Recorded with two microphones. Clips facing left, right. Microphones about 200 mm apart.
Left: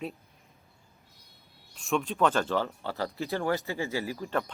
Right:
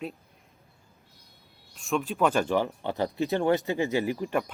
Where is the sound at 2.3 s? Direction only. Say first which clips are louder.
Right 3 dB; 15° right (ahead or behind).